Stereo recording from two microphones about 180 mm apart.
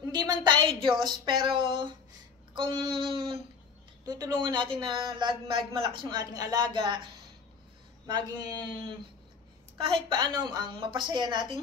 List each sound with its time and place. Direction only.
0.0 s a woman's voice: 20° right (ahead or behind)
8.1 s speech: 25° right (ahead or behind)